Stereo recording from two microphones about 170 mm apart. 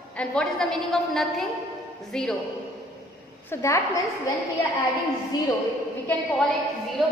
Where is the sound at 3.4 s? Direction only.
15° left (ahead or behind).